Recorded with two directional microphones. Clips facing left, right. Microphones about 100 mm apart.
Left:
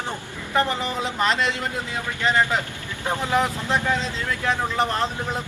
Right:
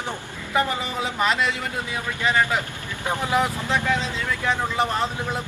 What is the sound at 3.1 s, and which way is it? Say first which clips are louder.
Speech: even; 20° right (ahead or behind).